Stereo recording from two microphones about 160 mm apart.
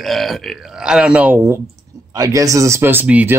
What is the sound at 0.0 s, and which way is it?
Speech, centre (ahead or behind).